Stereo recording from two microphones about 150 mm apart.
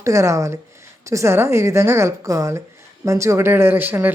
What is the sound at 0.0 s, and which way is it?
Speech, 20° right (ahead or behind).